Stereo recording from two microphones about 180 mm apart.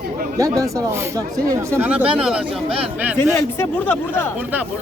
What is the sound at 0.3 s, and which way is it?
Speech, 20° right (ahead or behind).